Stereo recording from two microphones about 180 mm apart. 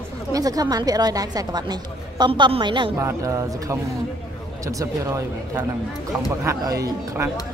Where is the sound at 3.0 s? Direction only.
15° right (ahead or behind).